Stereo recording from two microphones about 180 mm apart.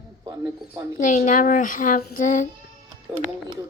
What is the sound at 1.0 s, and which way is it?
Speech, 45° left (ahead or behind).